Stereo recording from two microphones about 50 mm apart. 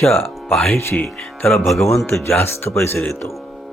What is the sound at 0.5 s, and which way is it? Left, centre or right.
Speech, centre.